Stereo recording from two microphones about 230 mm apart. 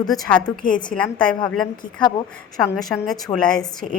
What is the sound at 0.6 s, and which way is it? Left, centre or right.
Speech, left.